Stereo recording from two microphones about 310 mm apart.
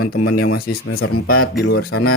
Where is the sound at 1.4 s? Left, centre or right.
Left.